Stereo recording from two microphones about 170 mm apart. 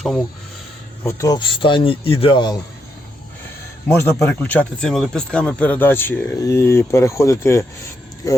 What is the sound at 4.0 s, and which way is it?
A man's voice, 10° left (ahead or behind).